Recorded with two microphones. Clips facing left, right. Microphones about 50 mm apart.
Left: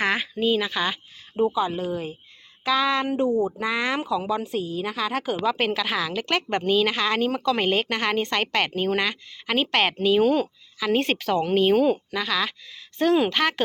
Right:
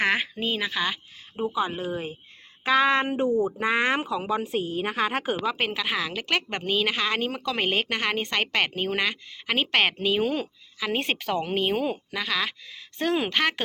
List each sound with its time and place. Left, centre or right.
0.0 s a sound: right
0.7 s speech: centre
1.5 s a woman's voice: right
5.4 s a woman's voice: centre